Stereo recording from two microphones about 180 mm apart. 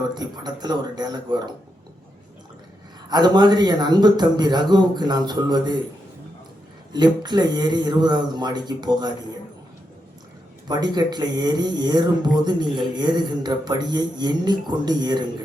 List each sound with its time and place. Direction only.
0.1 s a man's voice: 25° right (ahead or behind)
3.1 s a man's voice: 25° right (ahead or behind)
6.9 s a man's voice: 25° right (ahead or behind)
10.7 s a man's voice: 20° right (ahead or behind)